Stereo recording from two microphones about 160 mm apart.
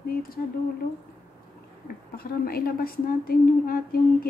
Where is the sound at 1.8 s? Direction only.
70° left (ahead or behind).